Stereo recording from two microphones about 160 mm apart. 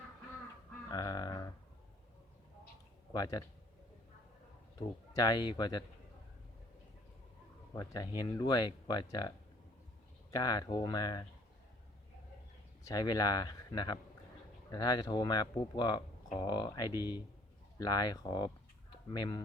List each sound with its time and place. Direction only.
0.9 s a sound: 25° left (ahead or behind)
3.1 s speech: 25° left (ahead or behind)
5.1 s speech: 25° left (ahead or behind)
7.8 s speech: 25° left (ahead or behind)
10.3 s speech: 25° left (ahead or behind)
12.8 s speech: 25° left (ahead or behind)